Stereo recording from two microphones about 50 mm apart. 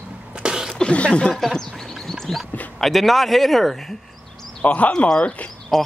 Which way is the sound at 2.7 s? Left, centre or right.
Centre.